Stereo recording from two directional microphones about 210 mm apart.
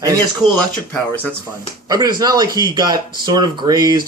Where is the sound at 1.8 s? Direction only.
20° right (ahead or behind).